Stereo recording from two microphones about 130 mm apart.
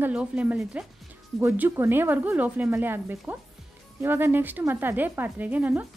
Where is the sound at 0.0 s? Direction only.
10° right (ahead or behind).